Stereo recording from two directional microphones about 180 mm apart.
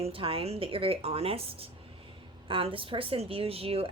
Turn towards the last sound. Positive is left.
turn(degrees=-30)  # may be behind; listen again after turning